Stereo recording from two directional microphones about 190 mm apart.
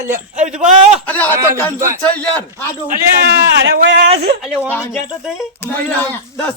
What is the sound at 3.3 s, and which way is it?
Speech, 65° right (ahead or behind).